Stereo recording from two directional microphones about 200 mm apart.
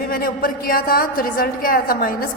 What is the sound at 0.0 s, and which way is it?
A woman's voice, 45° left (ahead or behind).